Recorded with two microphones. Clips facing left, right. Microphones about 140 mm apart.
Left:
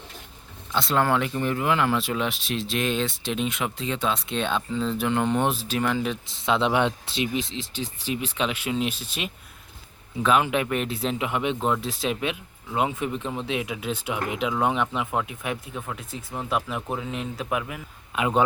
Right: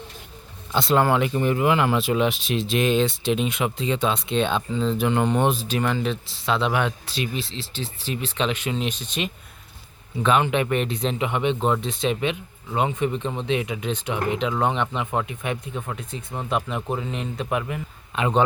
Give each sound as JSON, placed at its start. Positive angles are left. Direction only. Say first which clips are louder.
{"t": 0.7, "sound": "speech", "louder": "right 4 dB", "side_deg": -20}
{"t": 0.9, "sound": "speech", "louder": "right 3 dB", "side_deg": -10}